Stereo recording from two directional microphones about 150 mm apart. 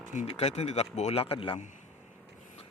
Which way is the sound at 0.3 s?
45° left (ahead or behind).